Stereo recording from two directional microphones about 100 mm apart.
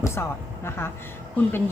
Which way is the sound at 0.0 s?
25° left (ahead or behind).